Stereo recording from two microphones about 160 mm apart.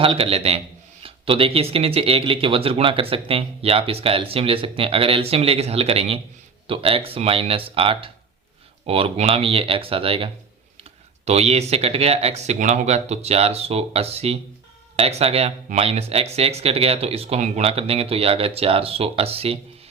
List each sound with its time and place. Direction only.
0.0 s speech: 35° right (ahead or behind)
11.3 s speech: 40° right (ahead or behind)